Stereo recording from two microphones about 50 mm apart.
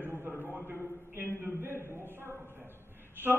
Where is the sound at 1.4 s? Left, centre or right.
Right.